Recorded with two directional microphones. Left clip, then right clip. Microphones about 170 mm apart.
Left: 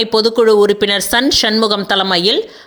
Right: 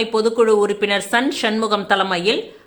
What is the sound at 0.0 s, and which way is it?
Speech, 35° left (ahead or behind).